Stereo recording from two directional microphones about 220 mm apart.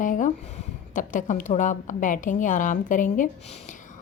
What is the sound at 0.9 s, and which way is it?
A woman's voice, 35° left (ahead or behind).